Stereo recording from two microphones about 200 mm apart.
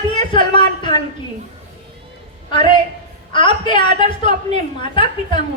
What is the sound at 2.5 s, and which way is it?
A woman's voice, 25° left (ahead or behind).